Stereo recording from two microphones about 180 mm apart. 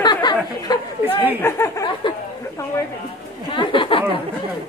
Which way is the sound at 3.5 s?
30° left (ahead or behind).